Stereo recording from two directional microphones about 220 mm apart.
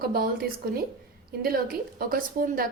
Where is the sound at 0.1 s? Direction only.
45° right (ahead or behind).